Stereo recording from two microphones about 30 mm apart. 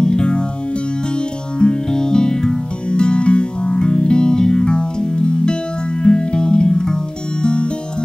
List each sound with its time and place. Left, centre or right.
0.0 s music: left
1.6 s music: left
7.4 s music: left